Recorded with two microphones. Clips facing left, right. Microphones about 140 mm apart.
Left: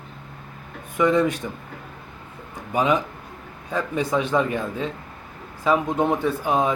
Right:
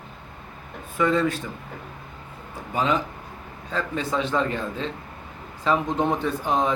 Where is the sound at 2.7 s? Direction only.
15° left (ahead or behind).